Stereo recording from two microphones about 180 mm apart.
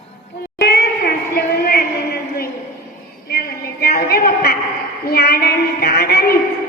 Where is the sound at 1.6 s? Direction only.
55° left (ahead or behind).